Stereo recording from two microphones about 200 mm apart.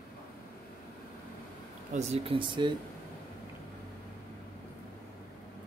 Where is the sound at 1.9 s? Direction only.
30° right (ahead or behind).